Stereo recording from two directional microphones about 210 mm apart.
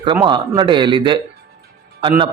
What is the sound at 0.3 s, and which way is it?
A man's voice, 20° right (ahead or behind).